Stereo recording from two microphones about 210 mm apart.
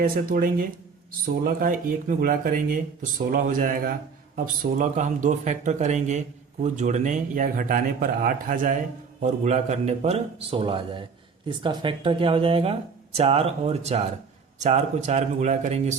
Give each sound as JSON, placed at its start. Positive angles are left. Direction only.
{"t": 0.0, "sound": "speech", "side_deg": -45}